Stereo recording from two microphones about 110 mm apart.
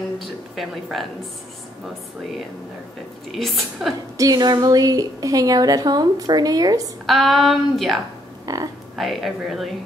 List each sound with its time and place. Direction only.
0.2 s a woman's voice: centre (ahead or behind)
3.3 s speech: centre (ahead or behind)
4.2 s a woman's voice: 35° right (ahead or behind)
7.1 s speech: centre (ahead or behind)
8.5 s a woman's voice: 30° right (ahead or behind)
8.9 s speech: centre (ahead or behind)